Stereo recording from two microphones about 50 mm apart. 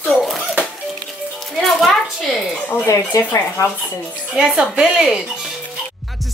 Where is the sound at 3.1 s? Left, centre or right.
Left.